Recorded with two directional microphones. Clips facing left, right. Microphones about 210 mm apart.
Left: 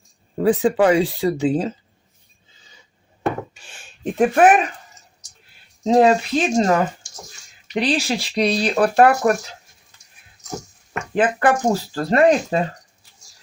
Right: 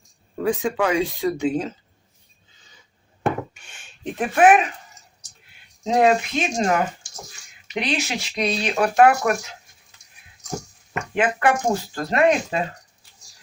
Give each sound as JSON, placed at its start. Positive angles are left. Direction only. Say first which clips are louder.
{"t": 0.3, "sound": "speech", "louder": "left 6 dB", "side_deg": 35}
{"t": 3.8, "sound": "speech", "louder": "left 8 dB", "side_deg": 40}
{"t": 5.8, "sound": "speech", "louder": "left 3 dB", "side_deg": 35}
{"t": 7.8, "sound": "speech", "louder": "left 5 dB", "side_deg": 35}
{"t": 11.1, "sound": "speech", "louder": "left 3 dB", "side_deg": 35}